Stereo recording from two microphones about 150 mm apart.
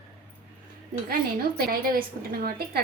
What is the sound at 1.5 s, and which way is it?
Speech, 80° right.